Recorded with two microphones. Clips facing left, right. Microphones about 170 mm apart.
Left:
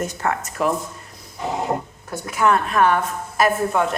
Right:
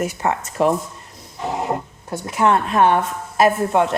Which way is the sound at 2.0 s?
25° right (ahead or behind).